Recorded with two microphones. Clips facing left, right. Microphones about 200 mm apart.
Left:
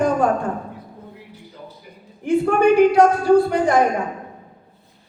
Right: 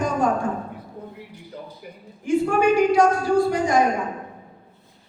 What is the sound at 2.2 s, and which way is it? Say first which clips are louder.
A woman's voice: left 3 dB; 60° left (ahead or behind).